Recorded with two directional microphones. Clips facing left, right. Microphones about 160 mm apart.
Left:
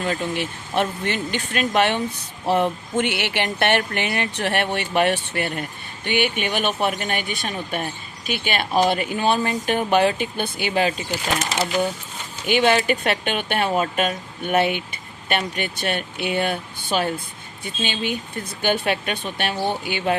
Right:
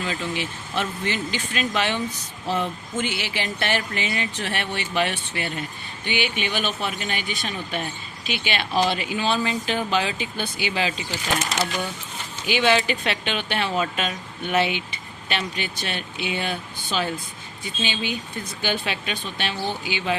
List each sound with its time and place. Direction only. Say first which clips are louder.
0.0 s speech: left 3 dB; 50° left (ahead or behind)
12.5 s speech: left 3 dB; 50° left (ahead or behind)